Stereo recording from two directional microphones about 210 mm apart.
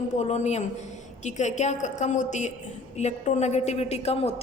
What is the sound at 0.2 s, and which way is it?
A woman's voice, 30° left (ahead or behind).